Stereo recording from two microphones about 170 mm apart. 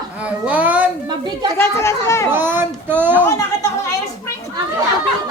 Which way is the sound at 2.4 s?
10° right (ahead or behind).